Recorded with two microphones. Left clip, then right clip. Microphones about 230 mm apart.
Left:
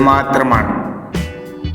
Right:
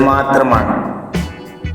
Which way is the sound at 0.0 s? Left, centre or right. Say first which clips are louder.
Even; left.